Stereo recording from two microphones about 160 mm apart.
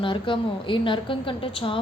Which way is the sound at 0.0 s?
30° left (ahead or behind).